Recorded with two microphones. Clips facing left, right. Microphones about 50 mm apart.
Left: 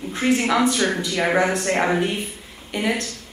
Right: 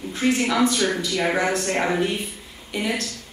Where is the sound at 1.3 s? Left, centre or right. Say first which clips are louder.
Left 3 dB; centre.